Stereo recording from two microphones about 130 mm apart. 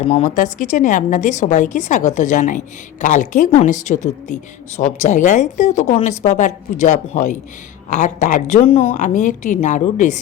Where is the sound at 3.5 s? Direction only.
60° left (ahead or behind).